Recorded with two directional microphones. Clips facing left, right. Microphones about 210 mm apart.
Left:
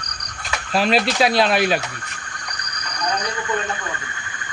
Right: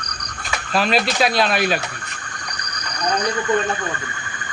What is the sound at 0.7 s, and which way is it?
Speech, 30° left (ahead or behind).